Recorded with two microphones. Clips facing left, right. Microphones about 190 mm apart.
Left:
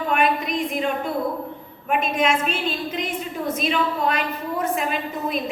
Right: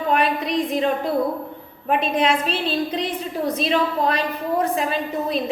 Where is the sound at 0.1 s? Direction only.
35° right (ahead or behind).